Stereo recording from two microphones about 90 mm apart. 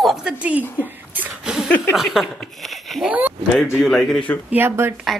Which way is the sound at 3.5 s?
25° left (ahead or behind).